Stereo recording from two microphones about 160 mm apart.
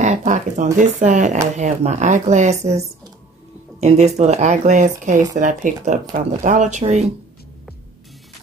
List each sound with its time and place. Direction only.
0.0 s speech: 50° right (ahead or behind)
3.8 s speech: 45° right (ahead or behind)